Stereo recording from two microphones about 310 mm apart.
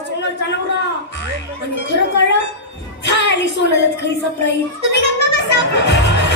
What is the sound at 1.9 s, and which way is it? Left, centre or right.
A woman's voice, left.